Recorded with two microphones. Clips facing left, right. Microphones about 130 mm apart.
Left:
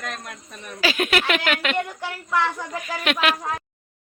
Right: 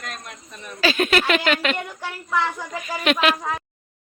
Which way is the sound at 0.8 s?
10° left (ahead or behind).